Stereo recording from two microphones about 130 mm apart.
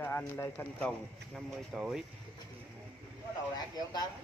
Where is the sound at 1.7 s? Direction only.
5° right (ahead or behind).